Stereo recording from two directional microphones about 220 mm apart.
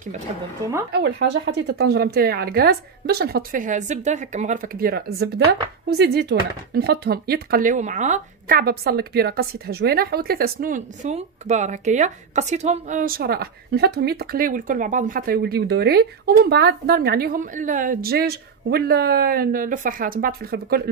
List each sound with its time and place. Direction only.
0.9 s speech: 50° right (ahead or behind)